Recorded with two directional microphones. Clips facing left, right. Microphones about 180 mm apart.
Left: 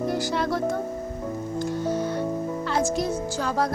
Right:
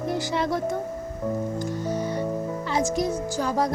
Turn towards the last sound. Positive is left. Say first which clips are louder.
# right 1 dB
turn(degrees=-15)  # may be behind; listen again after turning